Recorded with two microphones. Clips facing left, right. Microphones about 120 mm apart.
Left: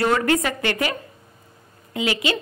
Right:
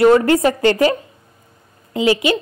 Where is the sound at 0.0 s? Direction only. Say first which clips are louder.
Right 8 dB; 30° right (ahead or behind).